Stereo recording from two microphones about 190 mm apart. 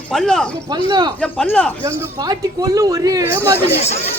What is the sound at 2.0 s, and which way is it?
Speech, 20° right (ahead or behind).